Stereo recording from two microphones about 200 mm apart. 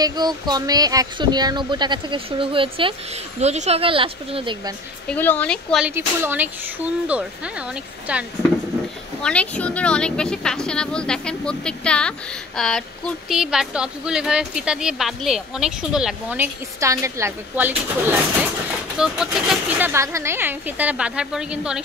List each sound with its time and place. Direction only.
0.0 s speech: 20° right (ahead or behind)
5.0 s speech: 10° left (ahead or behind)
5.9 s speech: 10° right (ahead or behind)
9.2 s speech: 5° left (ahead or behind)